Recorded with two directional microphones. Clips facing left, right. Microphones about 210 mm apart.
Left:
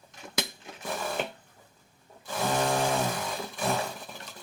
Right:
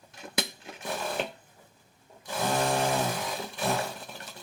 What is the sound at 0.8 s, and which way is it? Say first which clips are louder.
Sewing machine: even; centre (ahead or behind).